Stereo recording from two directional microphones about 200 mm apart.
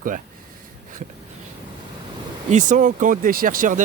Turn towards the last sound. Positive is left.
turn(degrees=-40)  # may be behind; listen again after turning